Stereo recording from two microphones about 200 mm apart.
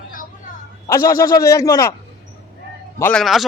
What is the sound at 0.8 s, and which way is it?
A man's voice, 15° left (ahead or behind).